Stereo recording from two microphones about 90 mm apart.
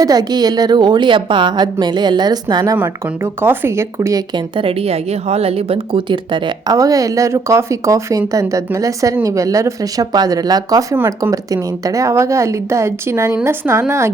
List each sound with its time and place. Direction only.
0.0 s a woman's voice: 45° right (ahead or behind)
3.4 s speech: 25° right (ahead or behind)
4.5 s a woman's voice: 90° right; by 6.7 s 65° right (ahead or behind)
6.7 s speech: 40° right (ahead or behind)